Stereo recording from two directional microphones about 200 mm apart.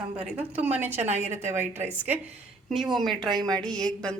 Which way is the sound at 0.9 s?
35° right (ahead or behind).